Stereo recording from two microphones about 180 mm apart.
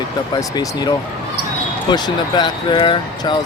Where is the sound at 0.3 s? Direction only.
20° left (ahead or behind).